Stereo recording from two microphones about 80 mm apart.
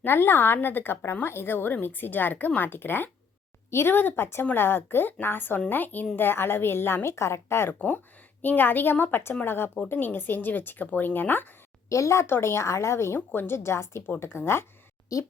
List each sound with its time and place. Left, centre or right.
0.0 s speech: left
7.8 s speech: centre
11.9 s speech: left
13.1 s speech: left